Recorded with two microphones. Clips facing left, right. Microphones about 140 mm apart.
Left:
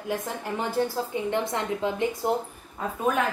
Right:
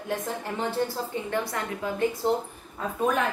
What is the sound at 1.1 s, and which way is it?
Speech, 20° left (ahead or behind).